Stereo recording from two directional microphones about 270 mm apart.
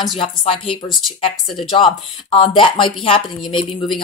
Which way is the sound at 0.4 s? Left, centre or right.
Centre.